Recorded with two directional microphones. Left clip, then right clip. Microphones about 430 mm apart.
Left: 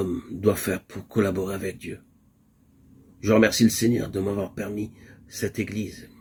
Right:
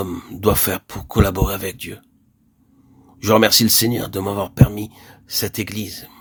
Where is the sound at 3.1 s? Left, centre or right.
Right.